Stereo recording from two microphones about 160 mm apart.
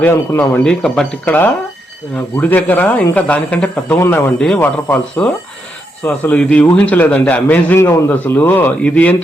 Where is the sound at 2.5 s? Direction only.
10° left (ahead or behind).